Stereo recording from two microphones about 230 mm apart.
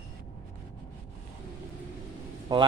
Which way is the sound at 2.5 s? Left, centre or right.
Centre.